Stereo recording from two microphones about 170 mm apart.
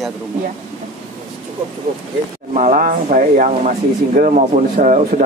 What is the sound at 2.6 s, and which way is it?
Speech, 50° right (ahead or behind).